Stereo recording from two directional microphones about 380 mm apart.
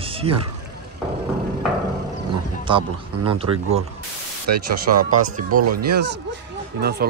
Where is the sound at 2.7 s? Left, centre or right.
Centre.